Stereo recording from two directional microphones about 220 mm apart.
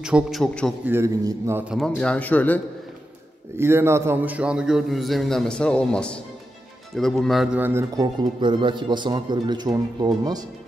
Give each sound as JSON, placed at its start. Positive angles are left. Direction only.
{"t": 0.0, "sound": "a man's voice", "side_deg": 0}
{"t": 0.9, "sound": "a man's voice", "side_deg": -10}
{"t": 1.7, "sound": "a man's voice", "side_deg": 0}
{"t": 3.5, "sound": "a man's voice", "side_deg": -10}